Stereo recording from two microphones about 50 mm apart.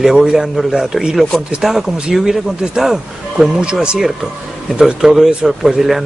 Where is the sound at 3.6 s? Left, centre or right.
Centre.